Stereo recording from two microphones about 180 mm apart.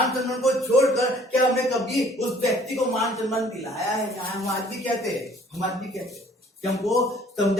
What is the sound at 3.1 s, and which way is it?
Speech, centre (ahead or behind).